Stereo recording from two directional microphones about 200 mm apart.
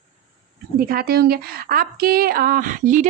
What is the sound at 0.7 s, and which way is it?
Speech, 50° right (ahead or behind).